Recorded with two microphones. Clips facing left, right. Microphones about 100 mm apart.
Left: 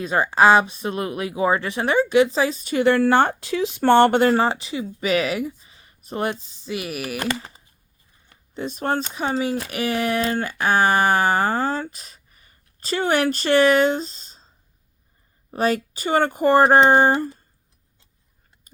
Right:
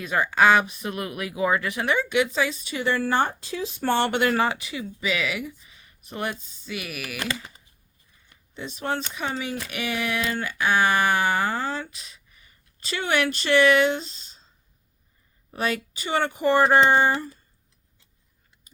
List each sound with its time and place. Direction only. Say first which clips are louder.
0.0 s speech: left 3 dB; 30° left (ahead or behind)
2.7 s speech: left 7 dB; 60° left (ahead or behind)
4.2 s speech: left 5 dB; 30° left (ahead or behind)
4.9 s speech: left 6 dB; 45° left (ahead or behind)
8.3 s speech: left 7 dB; 45° left (ahead or behind)
15.5 s speech: left 6 dB; 40° left (ahead or behind)